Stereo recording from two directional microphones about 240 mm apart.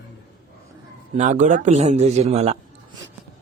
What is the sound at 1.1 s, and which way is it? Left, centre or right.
Speech, right.